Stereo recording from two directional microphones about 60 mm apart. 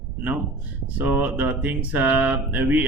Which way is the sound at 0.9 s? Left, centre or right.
Right.